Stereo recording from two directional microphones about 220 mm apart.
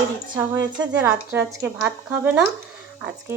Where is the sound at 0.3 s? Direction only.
15° right (ahead or behind).